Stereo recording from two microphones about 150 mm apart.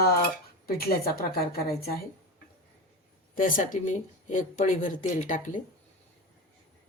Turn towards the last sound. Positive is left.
turn(degrees=60)  # may be behind; listen again after turning